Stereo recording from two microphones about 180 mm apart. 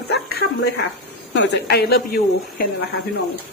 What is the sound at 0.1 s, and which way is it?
Dog, 70° left (ahead or behind).